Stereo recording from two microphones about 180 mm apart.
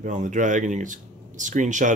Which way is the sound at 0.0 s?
45° right (ahead or behind).